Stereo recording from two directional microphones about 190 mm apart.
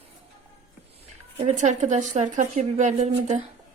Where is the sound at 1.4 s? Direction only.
40° right (ahead or behind).